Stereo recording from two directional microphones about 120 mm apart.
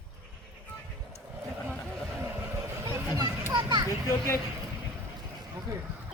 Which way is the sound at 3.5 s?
35° right (ahead or behind).